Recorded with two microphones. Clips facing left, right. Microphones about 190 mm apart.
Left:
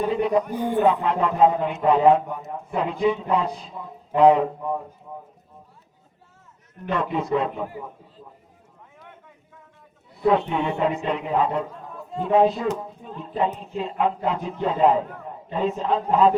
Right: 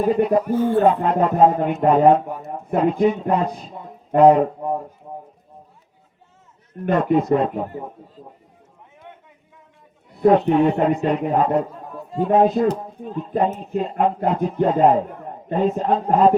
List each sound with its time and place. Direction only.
0.0 s a man's voice: 45° right (ahead or behind)
0.5 s speech: 15° left (ahead or behind)
0.9 s a man's voice: 45° right (ahead or behind)
5.0 s clip-clop: 45° right (ahead or behind)
6.8 s a man's voice: 45° right (ahead or behind)
10.2 s a man's voice: 45° right (ahead or behind)